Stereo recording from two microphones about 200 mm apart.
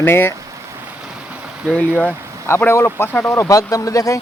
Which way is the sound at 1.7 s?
5° left (ahead or behind).